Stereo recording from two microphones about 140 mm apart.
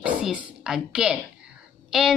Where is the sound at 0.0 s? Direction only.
5° right (ahead or behind).